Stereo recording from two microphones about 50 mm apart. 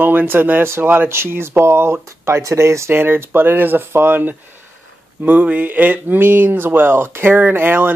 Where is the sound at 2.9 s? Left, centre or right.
Right.